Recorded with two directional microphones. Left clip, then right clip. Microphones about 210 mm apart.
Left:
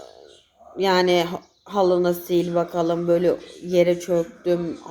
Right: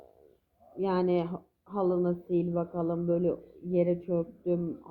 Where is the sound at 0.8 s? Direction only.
15° left (ahead or behind).